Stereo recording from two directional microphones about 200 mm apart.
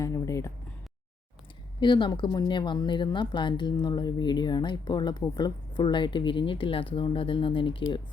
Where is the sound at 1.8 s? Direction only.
20° left (ahead or behind).